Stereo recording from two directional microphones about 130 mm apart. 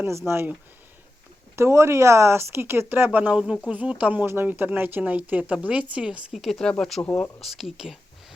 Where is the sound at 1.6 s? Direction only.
20° right (ahead or behind); by 7.3 s 10° left (ahead or behind).